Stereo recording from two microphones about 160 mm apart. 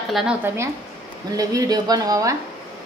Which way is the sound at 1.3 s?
20° right (ahead or behind).